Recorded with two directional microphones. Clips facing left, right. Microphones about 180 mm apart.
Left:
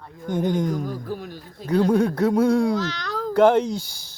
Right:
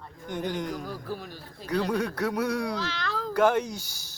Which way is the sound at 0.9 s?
15° left (ahead or behind).